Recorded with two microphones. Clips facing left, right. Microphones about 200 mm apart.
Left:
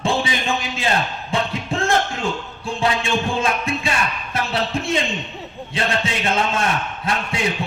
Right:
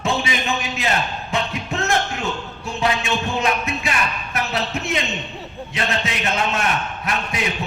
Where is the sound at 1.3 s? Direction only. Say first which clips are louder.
Left 3 dB; 30° left (ahead or behind).